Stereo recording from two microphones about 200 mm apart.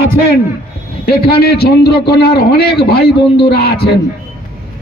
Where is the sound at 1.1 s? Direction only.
50° left (ahead or behind).